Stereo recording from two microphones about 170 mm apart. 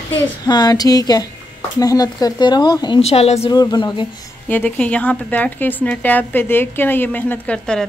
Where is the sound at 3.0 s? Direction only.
40° left (ahead or behind).